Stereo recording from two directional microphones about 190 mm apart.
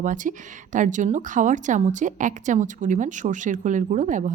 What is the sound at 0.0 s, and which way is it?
A woman's voice, 45° right (ahead or behind).